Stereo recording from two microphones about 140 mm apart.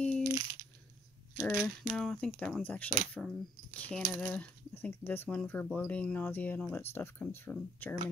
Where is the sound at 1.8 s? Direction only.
5° left (ahead or behind).